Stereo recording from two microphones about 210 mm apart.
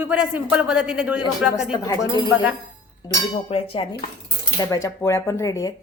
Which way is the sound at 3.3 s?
25° left (ahead or behind).